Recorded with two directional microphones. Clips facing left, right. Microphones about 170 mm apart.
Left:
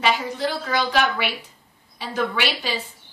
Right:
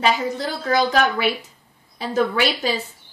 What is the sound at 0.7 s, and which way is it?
A woman's voice, 45° right (ahead or behind).